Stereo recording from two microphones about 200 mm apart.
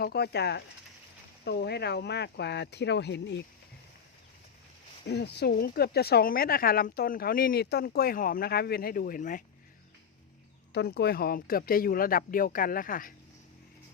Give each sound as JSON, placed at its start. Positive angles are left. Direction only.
{"t": 0.0, "sound": "speech", "side_deg": 55}
{"t": 5.0, "sound": "speech", "side_deg": 55}
{"t": 10.7, "sound": "speech", "side_deg": 55}